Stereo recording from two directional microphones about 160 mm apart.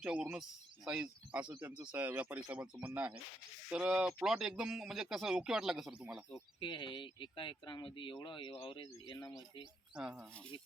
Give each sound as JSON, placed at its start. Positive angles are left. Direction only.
{"t": 0.0, "sound": "speech", "side_deg": -5}
{"t": 6.6, "sound": "speech", "side_deg": 30}
{"t": 9.9, "sound": "speech", "side_deg": -5}